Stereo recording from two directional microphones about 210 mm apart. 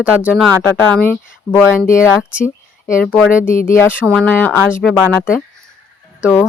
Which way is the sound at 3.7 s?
10° left (ahead or behind).